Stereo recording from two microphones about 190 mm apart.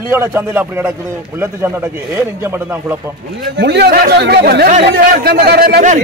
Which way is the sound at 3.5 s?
60° right (ahead or behind).